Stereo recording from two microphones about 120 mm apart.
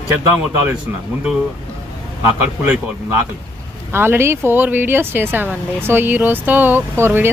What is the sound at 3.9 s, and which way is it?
Speech, 20° right (ahead or behind).